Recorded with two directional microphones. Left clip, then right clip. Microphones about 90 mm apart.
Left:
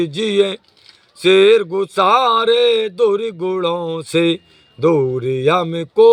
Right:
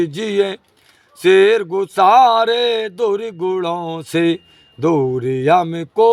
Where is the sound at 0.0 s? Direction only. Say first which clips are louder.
Left 1 dB; 30° right (ahead or behind).